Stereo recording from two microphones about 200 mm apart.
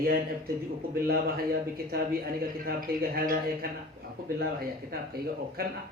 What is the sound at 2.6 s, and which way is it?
Speech, 50° right (ahead or behind).